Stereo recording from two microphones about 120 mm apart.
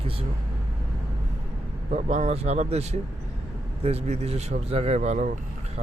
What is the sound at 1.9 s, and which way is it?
A man's voice, 80° right.